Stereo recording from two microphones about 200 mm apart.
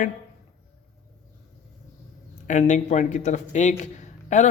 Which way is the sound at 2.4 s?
35° left (ahead or behind).